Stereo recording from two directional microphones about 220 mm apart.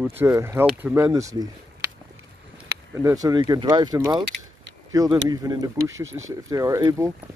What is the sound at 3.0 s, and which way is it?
Speech, 15° right (ahead or behind).